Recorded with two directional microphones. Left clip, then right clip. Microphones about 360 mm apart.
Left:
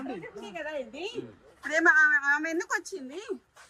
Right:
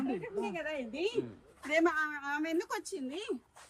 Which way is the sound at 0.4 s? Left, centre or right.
Centre.